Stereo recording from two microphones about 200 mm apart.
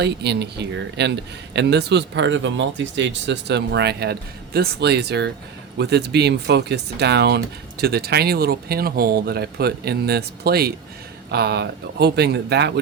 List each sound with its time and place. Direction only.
0.0 s speech: 55° right (ahead or behind)